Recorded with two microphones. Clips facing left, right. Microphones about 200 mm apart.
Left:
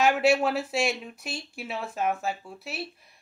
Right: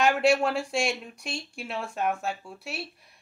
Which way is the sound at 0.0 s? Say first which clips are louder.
Even; 5° left (ahead or behind).